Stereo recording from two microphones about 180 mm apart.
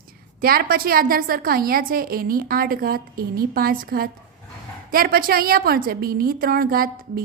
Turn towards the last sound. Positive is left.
turn(degrees=-55)  # may be behind; listen again after turning